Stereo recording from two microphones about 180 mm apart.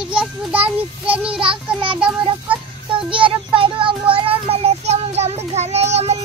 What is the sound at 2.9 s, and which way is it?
Child singing, 30° right (ahead or behind).